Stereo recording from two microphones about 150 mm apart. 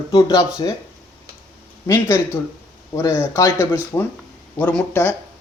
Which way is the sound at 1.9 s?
15° left (ahead or behind).